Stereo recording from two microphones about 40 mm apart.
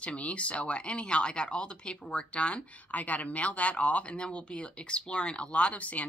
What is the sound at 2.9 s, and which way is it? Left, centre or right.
Speech, left.